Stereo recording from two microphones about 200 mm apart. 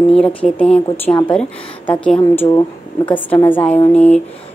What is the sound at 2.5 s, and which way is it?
Speech, 25° left (ahead or behind).